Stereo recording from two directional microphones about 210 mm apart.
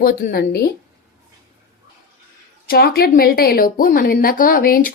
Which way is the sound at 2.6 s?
45° left (ahead or behind).